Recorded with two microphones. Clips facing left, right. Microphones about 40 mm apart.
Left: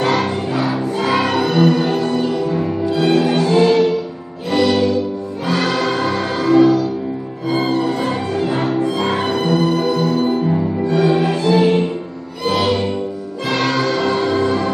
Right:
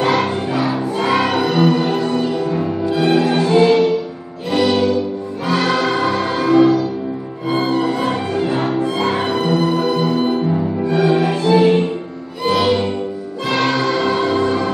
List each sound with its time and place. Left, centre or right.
0.0 s music: centre